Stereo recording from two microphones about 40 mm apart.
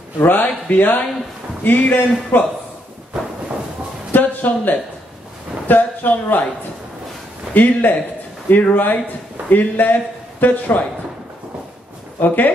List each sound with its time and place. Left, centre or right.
0.2 s a man's voice: left
4.1 s a sound: left
5.7 s a man's voice: left
7.5 s a man's voice: left
12.2 s a man's voice: left